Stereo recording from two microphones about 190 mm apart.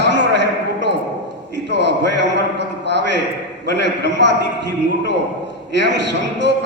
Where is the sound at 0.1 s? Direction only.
65° right (ahead or behind).